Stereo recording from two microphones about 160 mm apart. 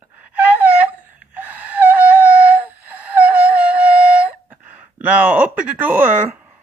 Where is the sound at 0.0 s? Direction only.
10° right (ahead or behind).